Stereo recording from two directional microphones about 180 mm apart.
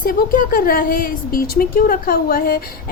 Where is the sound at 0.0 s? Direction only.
50° left (ahead or behind).